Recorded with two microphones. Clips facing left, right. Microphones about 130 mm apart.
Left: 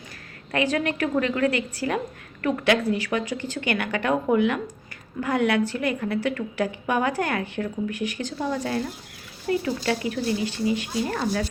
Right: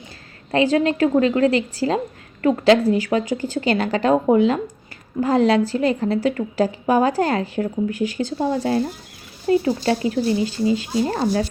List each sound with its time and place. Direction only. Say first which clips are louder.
0.5 s speech: right 7 dB; 30° right (ahead or behind)